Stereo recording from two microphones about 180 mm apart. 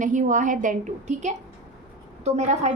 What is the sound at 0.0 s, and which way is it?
A woman's voice, 45° right (ahead or behind).